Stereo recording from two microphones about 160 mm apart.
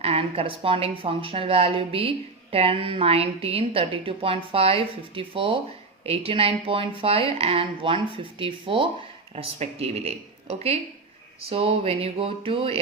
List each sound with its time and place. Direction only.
0.0 s a woman's voice: 40° right (ahead or behind)
11.4 s a woman's voice: 35° right (ahead or behind)